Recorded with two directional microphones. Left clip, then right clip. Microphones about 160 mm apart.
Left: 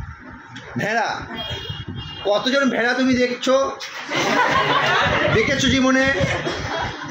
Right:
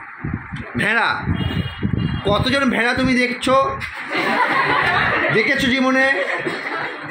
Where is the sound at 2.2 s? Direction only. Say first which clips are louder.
Even; 65° right (ahead or behind).